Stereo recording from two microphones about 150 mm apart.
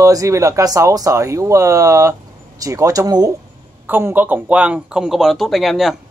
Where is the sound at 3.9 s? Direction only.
15° right (ahead or behind).